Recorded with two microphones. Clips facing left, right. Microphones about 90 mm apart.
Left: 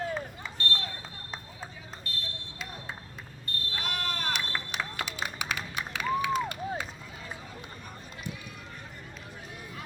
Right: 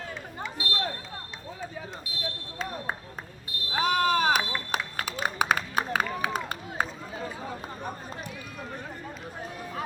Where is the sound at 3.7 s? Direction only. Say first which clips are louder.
Right 12 dB; 50° right (ahead or behind).